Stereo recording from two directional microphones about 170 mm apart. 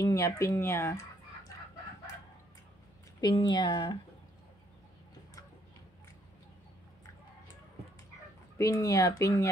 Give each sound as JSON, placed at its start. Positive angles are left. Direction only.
{"t": 0.0, "sound": "speech", "side_deg": 20}
{"t": 3.2, "sound": "speech", "side_deg": 25}
{"t": 8.5, "sound": "speech", "side_deg": 20}